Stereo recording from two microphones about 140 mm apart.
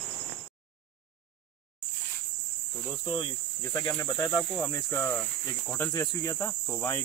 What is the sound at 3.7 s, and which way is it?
Cricket, 25° left (ahead or behind).